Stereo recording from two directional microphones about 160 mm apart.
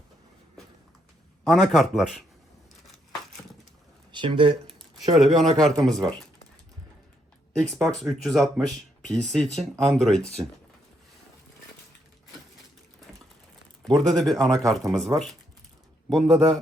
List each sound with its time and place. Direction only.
1.5 s speech: centre (ahead or behind)
4.1 s speech: 30° right (ahead or behind)
5.1 s speech: centre (ahead or behind)
7.5 s speech: centre (ahead or behind)
14.0 s speech: 5° left (ahead or behind)